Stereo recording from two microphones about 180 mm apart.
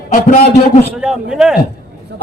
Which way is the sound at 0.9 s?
5° right (ahead or behind).